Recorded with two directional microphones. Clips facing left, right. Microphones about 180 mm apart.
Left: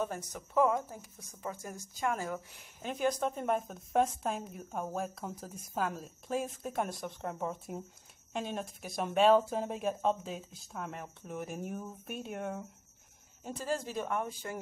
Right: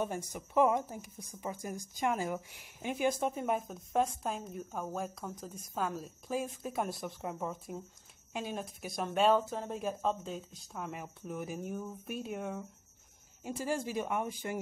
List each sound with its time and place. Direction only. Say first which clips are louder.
0.0 s a woman's voice: right 1 dB; 15° right (ahead or behind)
13.4 s speech: right 1 dB; 10° right (ahead or behind)